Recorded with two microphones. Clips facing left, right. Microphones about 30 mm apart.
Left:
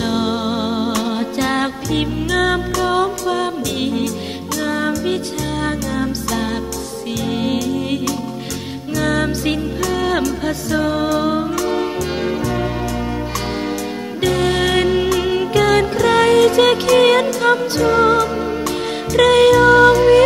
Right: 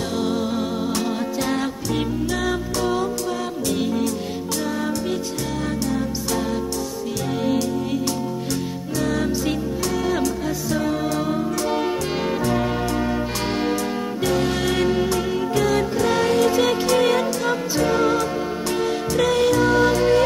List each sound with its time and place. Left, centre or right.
0.0 s music: left
9.1 s music: left
14.3 s music: left
16.6 s music: left
19.1 s music: left